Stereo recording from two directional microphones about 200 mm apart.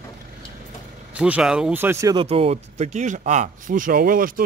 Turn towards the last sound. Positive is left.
turn(degrees=-45)  # may be behind; listen again after turning